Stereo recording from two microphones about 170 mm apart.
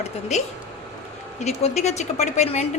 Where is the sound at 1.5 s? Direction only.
40° left (ahead or behind).